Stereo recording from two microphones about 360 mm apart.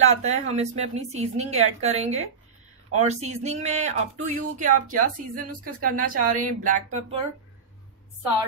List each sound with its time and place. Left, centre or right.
0.2 s a woman's voice: centre